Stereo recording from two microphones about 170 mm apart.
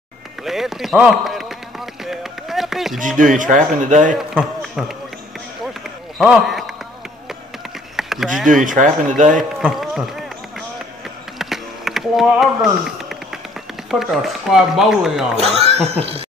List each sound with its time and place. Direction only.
0.5 s speech: centre (ahead or behind)
2.0 s run: centre (ahead or behind)
3.2 s speech: 50° right (ahead or behind)
4.3 s speech: 5° right (ahead or behind)
6.1 s speech: centre (ahead or behind)
7.9 s a sound: centre (ahead or behind)
8.5 s speech: 50° right (ahead or behind)
9.6 s a man's voice: 5° right (ahead or behind)
11.3 s a sound: centre (ahead or behind)
13.8 s speech: centre (ahead or behind)
15.3 s speech: 40° right (ahead or behind)